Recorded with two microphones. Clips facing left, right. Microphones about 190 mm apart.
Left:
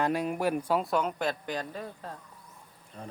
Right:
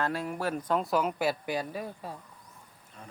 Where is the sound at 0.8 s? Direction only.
Centre (ahead or behind).